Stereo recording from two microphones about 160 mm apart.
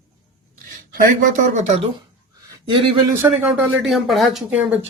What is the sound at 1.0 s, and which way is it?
Speech, 55° right (ahead or behind).